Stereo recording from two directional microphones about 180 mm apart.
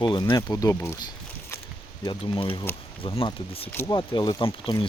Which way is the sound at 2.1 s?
30° left (ahead or behind).